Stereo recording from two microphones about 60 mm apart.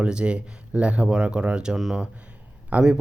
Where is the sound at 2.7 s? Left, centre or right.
Right.